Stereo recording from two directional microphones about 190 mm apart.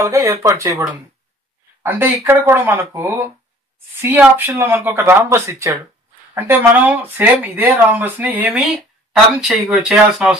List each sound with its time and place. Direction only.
0.0 s speech: 15° right (ahead or behind)